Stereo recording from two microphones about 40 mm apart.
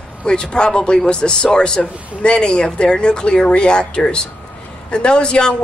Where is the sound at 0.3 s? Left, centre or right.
Left.